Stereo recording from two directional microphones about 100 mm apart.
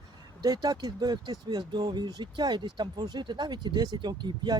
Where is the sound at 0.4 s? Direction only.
40° right (ahead or behind).